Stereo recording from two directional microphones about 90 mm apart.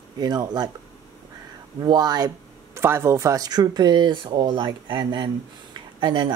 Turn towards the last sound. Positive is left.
turn(degrees=-55)  # may be behind; listen again after turning